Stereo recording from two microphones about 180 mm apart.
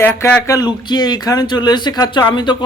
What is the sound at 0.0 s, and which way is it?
Speech, 10° left (ahead or behind).